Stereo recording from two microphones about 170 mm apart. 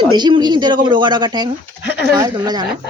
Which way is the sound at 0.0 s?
25° right (ahead or behind).